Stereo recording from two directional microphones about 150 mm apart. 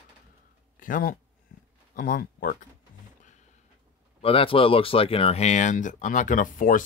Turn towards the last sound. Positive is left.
turn(degrees=60)  # may be behind; listen again after turning